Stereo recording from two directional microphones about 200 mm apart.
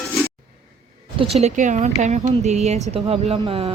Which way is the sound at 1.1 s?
30° right (ahead or behind).